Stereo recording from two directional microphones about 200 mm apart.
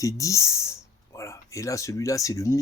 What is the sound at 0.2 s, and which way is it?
Speech, 15° left (ahead or behind).